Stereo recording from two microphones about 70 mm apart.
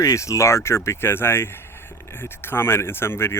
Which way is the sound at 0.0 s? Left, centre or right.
Left.